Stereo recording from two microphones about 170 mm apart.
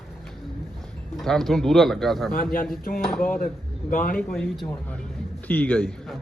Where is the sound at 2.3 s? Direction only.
55° left (ahead or behind).